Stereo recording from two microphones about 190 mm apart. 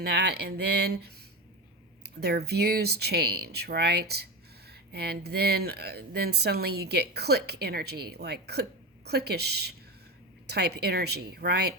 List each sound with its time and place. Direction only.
0.0 s speech: 60° right (ahead or behind)